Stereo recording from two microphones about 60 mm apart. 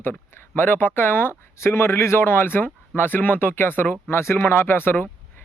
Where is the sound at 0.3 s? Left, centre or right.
Left.